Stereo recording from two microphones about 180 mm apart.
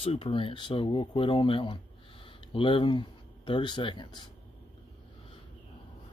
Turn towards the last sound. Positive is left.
turn(degrees=25)  # may be behind; listen again after turning